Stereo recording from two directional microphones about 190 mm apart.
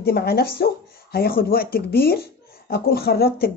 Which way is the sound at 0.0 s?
55° left (ahead or behind).